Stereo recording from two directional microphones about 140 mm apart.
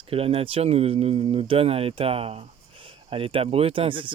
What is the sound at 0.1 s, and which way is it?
Speech, 45° right (ahead or behind).